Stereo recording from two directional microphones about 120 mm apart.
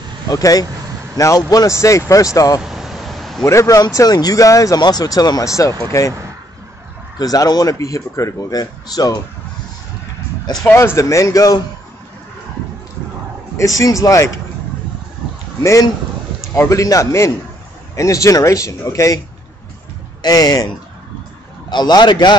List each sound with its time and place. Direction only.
0.3 s speech: 30° left (ahead or behind)
2.6 s vehicle: 5° right (ahead or behind)
3.4 s speech: 25° left (ahead or behind)
7.2 s speech: 35° left (ahead or behind)
10.6 s speech: 20° left (ahead or behind)
13.6 s speech: 30° left (ahead or behind)
15.6 s speech: 25° left (ahead or behind)